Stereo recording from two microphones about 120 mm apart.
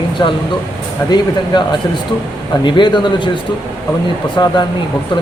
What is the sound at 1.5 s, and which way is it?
Speech, 40° left (ahead or behind).